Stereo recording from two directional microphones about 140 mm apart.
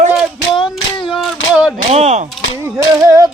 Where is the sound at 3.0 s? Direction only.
25° right (ahead or behind).